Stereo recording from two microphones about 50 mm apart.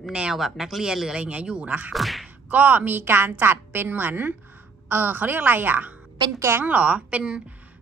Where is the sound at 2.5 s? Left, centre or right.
Right.